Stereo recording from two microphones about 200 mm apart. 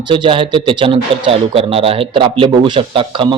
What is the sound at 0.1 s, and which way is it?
A man's voice, 25° right (ahead or behind).